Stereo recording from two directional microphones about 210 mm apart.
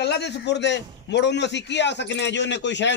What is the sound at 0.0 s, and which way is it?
A man's voice, 55° left (ahead or behind).